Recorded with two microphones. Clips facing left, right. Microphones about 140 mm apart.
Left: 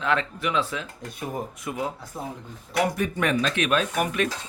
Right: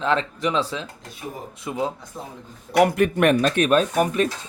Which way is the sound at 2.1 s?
10° left (ahead or behind).